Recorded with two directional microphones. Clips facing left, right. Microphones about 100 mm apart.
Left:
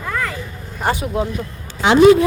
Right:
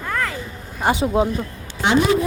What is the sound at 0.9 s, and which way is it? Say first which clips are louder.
Speech: right 2 dB; 25° right (ahead or behind).